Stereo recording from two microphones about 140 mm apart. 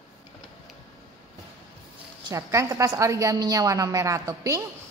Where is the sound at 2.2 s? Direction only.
25° right (ahead or behind).